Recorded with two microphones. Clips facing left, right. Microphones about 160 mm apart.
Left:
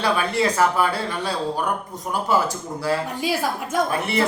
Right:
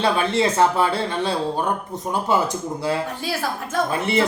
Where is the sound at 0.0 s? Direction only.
25° right (ahead or behind).